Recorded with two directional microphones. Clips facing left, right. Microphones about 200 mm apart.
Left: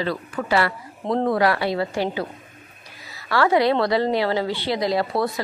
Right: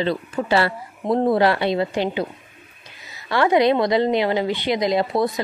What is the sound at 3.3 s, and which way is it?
A woman's voice, 20° right (ahead or behind).